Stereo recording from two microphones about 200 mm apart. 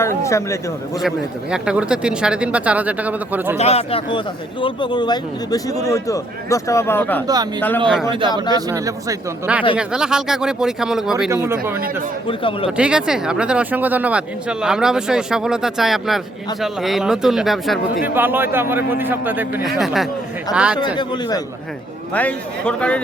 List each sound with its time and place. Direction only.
0.0 s a man's voice: 15° left (ahead or behind)
1.0 s speech: 5° right (ahead or behind)
3.6 s a man's voice: 30° left (ahead or behind); by 7.3 s 10° left (ahead or behind)
8.5 s a man's voice: 15° right (ahead or behind)
12.3 s a man's voice: 25° left (ahead or behind)
12.7 s a man's voice: 5° right (ahead or behind)
20.7 s a man's voice: 20° left (ahead or behind)
22.1 s a man's voice: 5° left (ahead or behind)